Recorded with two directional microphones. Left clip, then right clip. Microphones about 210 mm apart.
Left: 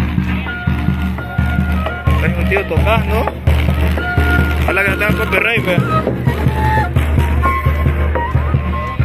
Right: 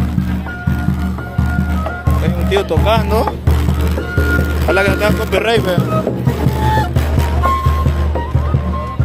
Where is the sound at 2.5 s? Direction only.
30° right (ahead or behind).